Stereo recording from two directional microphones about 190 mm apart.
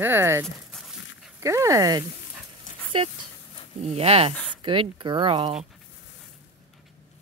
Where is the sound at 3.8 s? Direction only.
35° right (ahead or behind).